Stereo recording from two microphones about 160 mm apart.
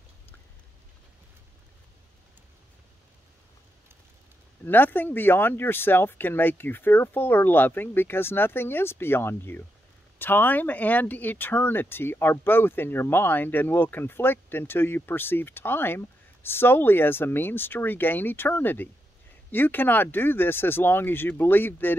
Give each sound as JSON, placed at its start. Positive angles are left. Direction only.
{"t": 4.6, "sound": "speech", "side_deg": 10}